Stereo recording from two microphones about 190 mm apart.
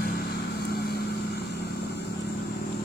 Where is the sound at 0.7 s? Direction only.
55° left (ahead or behind).